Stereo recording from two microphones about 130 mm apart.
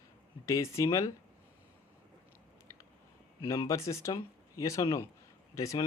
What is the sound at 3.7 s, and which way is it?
Speech, 25° left (ahead or behind).